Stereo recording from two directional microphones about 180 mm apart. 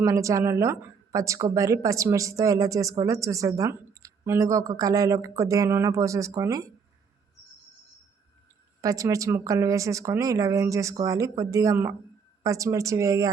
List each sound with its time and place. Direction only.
0.0 s speech: 15° right (ahead or behind)
8.8 s speech: 20° right (ahead or behind)